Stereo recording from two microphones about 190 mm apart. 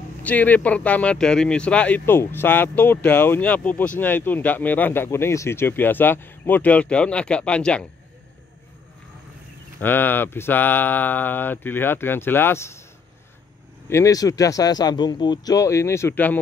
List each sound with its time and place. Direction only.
0.2 s speech: 10° left (ahead or behind)
9.8 s speech: 10° left (ahead or behind)
13.8 s speech: 15° left (ahead or behind)